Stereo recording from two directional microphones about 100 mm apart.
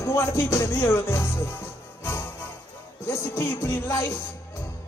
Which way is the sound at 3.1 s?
25° left (ahead or behind).